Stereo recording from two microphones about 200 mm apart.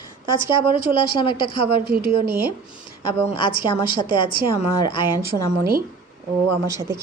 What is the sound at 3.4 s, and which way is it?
A woman's voice, 25° left (ahead or behind).